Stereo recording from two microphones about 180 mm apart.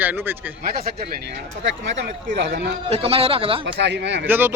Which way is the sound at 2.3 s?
80° right.